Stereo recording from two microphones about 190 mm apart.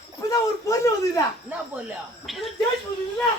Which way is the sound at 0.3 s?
15° left (ahead or behind).